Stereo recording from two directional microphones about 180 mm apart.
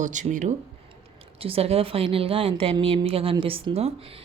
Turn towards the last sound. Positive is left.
turn(degrees=-30)  # may be behind; listen again after turning